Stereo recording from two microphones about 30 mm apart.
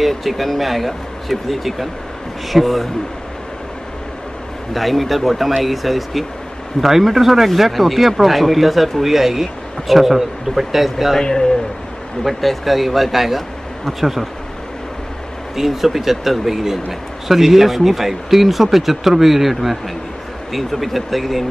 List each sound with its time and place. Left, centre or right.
0.2 s speech: centre
4.7 s speech: centre
9.0 s speech: centre
11.1 s speech: centre
12.2 s speech: centre
15.5 s speech: centre